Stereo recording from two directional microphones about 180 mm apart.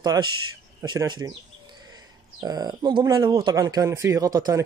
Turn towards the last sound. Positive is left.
turn(degrees=-20)  # may be behind; listen again after turning